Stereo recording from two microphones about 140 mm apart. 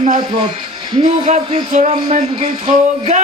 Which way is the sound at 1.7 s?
55° right (ahead or behind).